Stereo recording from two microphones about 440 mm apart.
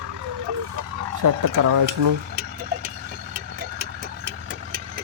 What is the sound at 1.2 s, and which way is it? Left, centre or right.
Speech, right.